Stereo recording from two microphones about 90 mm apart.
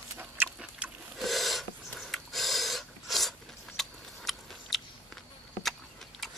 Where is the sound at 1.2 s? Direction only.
Centre (ahead or behind).